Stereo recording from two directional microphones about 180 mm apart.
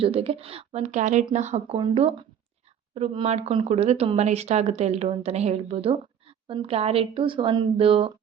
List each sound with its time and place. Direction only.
0.0 s a woman's voice: 30° right (ahead or behind)